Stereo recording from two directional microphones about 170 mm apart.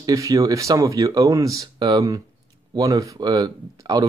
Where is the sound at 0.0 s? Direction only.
20° right (ahead or behind).